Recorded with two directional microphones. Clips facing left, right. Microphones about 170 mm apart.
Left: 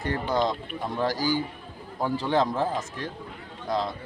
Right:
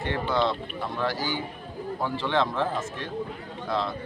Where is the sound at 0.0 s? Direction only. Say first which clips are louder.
Even; 40° left (ahead or behind).